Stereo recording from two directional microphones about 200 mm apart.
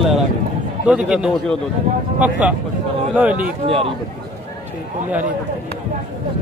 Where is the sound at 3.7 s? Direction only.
30° right (ahead or behind).